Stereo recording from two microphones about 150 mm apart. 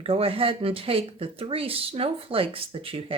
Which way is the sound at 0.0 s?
40° right (ahead or behind).